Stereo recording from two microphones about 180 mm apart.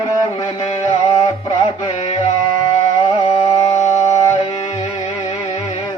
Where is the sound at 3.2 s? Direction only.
35° left (ahead or behind).